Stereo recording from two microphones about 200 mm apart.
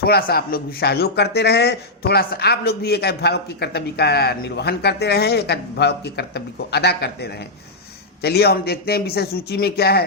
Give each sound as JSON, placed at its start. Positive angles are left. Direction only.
{"t": 0.0, "sound": "a man's voice", "side_deg": 50}